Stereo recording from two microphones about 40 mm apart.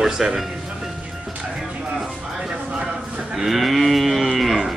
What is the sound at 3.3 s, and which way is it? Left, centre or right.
Speech, centre.